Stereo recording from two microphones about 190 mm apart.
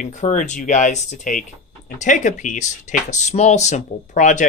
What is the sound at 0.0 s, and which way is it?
Speech, 40° left (ahead or behind).